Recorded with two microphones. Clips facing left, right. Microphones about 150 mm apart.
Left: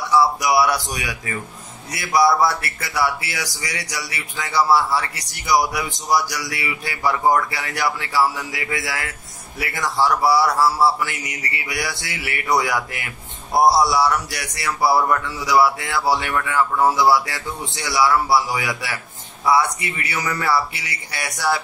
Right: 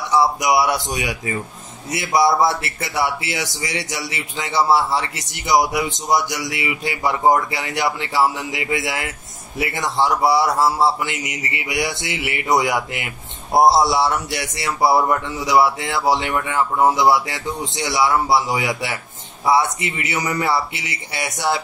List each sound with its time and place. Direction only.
0.1 s a man's voice: 20° right (ahead or behind)